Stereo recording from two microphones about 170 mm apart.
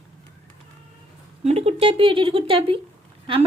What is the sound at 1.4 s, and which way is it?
Speech, 40° right (ahead or behind).